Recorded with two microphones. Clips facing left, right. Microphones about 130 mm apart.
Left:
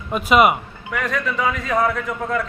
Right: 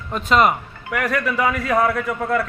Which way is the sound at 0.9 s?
10° right (ahead or behind).